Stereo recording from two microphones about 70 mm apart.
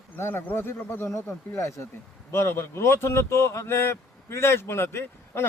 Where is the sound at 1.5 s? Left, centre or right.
Left.